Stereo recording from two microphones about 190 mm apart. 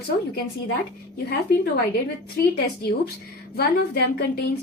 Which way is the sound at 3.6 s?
55° left (ahead or behind).